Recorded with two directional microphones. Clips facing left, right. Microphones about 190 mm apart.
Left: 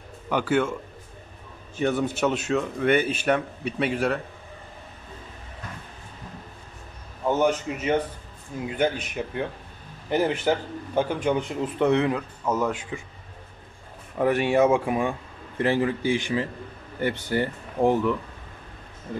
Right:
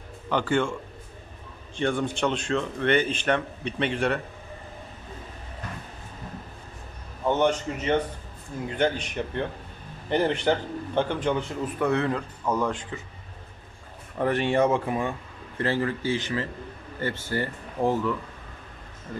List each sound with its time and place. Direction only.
0.3 s speech: 5° left (ahead or behind)
1.8 s speech: 5° left (ahead or behind)
7.2 s speech: 5° left (ahead or behind)
12.1 s speech: 5° left (ahead or behind)
14.1 s speech: 10° left (ahead or behind)